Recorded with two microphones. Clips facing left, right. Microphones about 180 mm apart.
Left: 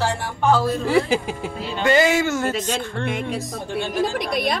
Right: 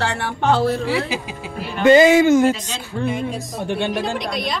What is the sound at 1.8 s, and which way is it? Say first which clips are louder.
Speech: right 7 dB; 20° right (ahead or behind).